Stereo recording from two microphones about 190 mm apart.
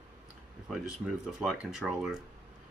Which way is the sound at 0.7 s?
Centre (ahead or behind).